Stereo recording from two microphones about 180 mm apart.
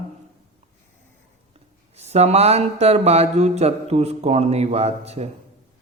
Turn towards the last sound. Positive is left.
turn(degrees=-35)  # may be behind; listen again after turning